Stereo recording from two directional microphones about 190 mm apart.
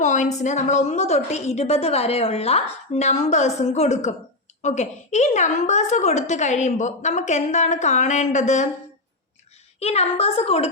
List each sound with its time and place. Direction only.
0.0 s a woman's voice: 40° left (ahead or behind)
9.8 s a woman's voice: 35° left (ahead or behind)